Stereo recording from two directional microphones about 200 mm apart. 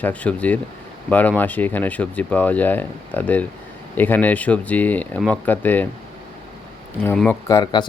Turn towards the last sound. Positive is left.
turn(degrees=20)  # may be behind; listen again after turning